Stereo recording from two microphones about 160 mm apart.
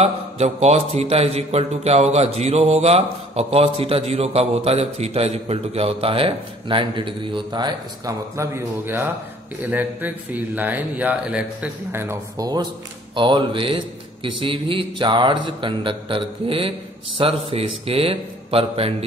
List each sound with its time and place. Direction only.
0.0 s a man's voice: 45° right (ahead or behind)